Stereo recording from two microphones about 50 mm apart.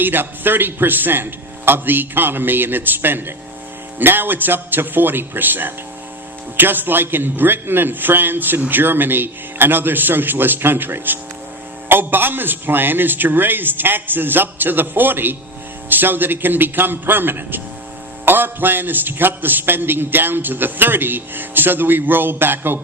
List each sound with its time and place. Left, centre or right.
0.0 s a man's voice: right